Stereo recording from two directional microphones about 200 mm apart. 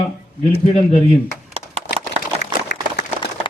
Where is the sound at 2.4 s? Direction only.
55° left (ahead or behind).